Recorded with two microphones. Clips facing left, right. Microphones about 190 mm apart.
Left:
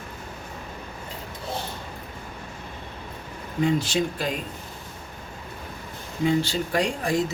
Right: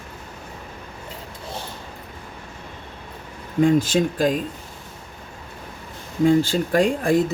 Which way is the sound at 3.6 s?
50° right (ahead or behind).